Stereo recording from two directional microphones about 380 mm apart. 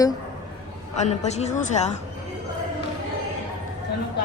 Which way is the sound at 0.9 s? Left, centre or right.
Centre.